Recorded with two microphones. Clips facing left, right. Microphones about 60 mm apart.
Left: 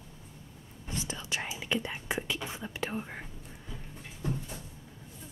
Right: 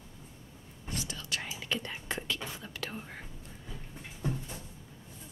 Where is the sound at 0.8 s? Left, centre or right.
Left.